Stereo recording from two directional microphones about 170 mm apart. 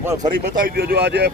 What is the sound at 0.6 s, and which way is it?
Speech, 60° right (ahead or behind).